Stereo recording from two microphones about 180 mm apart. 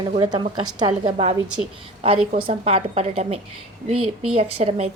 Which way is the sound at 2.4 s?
35° right (ahead or behind).